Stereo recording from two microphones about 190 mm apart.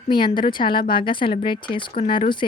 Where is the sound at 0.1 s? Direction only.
25° left (ahead or behind).